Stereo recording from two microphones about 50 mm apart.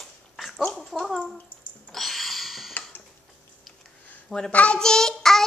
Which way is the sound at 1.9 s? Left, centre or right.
Centre.